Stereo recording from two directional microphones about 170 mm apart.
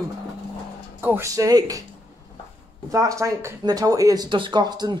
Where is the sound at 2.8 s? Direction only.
20° right (ahead or behind).